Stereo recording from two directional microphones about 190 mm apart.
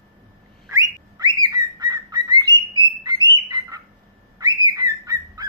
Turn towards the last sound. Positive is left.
turn(degrees=-20)  # may be behind; listen again after turning